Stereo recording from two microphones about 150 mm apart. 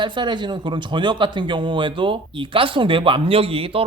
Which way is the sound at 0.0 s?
30° right (ahead or behind).